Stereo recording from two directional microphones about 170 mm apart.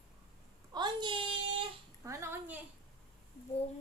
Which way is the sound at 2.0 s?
15° right (ahead or behind).